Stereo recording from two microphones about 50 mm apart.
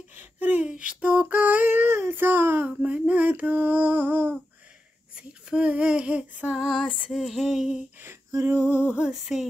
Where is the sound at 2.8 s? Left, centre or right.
Right.